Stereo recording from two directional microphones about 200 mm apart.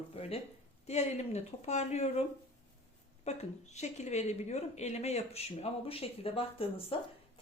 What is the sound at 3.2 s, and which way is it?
A woman's voice, 35° left (ahead or behind).